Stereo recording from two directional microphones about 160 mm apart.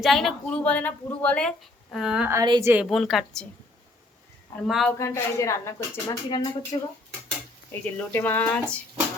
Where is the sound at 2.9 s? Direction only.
Centre (ahead or behind).